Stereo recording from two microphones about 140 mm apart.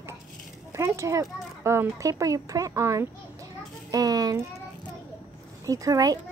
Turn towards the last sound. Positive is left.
turn(degrees=-25)  # may be behind; listen again after turning